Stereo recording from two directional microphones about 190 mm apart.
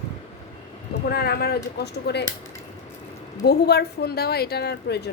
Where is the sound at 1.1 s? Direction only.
55° left (ahead or behind).